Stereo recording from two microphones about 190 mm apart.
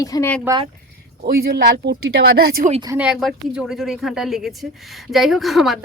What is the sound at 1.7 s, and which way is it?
Speech, 60° right (ahead or behind).